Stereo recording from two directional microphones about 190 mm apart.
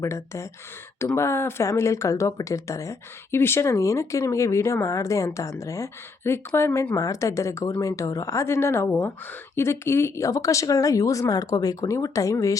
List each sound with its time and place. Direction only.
0.0 s speech: 15° left (ahead or behind)